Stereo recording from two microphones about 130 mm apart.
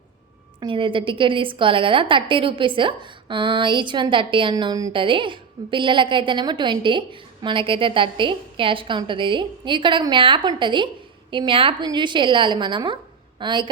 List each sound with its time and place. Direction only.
0.6 s a woman's voice: 40° right (ahead or behind)